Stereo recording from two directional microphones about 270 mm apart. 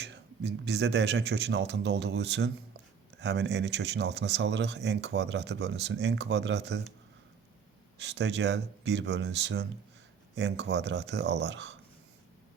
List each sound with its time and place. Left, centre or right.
0.0 s speech: right
7.9 s speech: right